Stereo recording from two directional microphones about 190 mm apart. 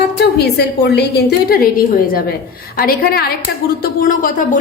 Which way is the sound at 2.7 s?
50° left (ahead or behind).